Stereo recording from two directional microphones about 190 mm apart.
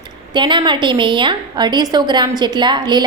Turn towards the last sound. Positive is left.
turn(degrees=-25)  # may be behind; listen again after turning